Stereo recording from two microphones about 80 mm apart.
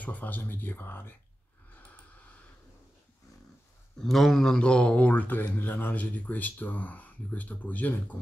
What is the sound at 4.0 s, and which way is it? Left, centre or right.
Speech, centre.